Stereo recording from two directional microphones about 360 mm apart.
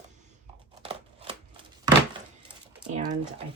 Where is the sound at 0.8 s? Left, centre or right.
Centre.